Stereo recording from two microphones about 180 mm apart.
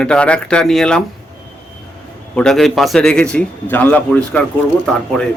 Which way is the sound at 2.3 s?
5° left (ahead or behind).